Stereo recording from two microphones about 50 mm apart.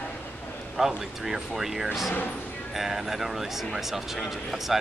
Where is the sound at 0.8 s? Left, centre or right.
Centre.